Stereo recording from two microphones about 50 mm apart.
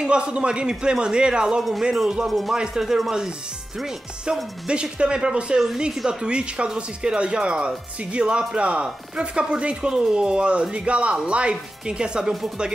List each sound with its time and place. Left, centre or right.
0.0 s speech: centre
1.6 s speech: centre
2.5 s speech: centre
2.8 s speech: centre
4.3 s speech: centre